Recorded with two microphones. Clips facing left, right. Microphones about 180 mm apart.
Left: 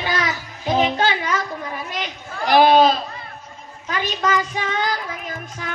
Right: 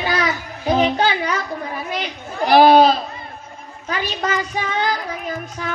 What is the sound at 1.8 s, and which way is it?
Child singing, 45° right (ahead or behind).